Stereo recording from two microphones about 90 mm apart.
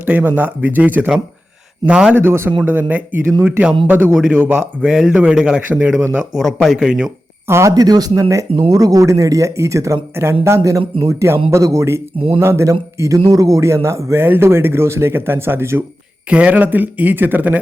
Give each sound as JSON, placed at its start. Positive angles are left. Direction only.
{"t": 0.0, "sound": "speech", "side_deg": -20}
{"t": 2.1, "sound": "speech", "side_deg": -25}
{"t": 6.3, "sound": "speech", "side_deg": 0}
{"t": 7.4, "sound": "speech", "side_deg": -30}
{"t": 7.7, "sound": "speech", "side_deg": -45}
{"t": 16.3, "sound": "speech", "side_deg": -15}